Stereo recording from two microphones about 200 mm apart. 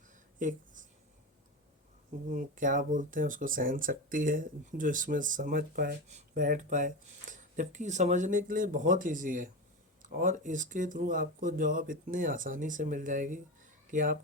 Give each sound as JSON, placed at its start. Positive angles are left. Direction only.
{"t": 0.3, "sound": "speech", "side_deg": -40}
{"t": 2.3, "sound": "speech", "side_deg": -40}